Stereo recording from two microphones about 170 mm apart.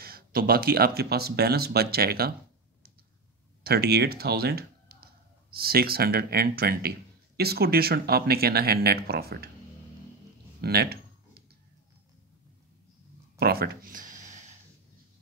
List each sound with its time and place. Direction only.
0.0 s speech: 60° right (ahead or behind)
3.6 s speech: 70° right (ahead or behind)
10.6 s a sound: 70° right (ahead or behind)
13.4 s speech: 65° right (ahead or behind); by 14.3 s 50° right (ahead or behind)